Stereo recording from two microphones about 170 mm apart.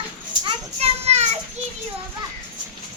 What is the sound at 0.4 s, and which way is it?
Children playing, 35° right (ahead or behind).